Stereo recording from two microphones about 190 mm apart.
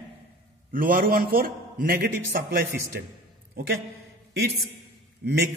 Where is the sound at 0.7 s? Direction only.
50° right (ahead or behind).